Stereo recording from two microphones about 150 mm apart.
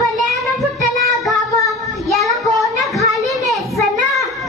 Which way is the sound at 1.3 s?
20° left (ahead or behind).